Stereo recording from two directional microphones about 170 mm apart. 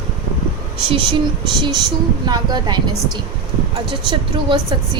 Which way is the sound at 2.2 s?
25° right (ahead or behind).